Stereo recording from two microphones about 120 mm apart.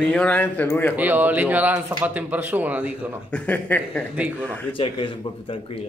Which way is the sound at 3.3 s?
15° left (ahead or behind).